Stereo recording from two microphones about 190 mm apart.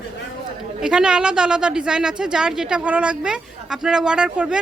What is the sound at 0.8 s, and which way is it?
A woman's voice, 5° right (ahead or behind).